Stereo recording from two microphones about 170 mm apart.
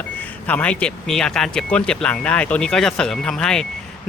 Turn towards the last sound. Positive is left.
turn(degrees=5)  # may be behind; listen again after turning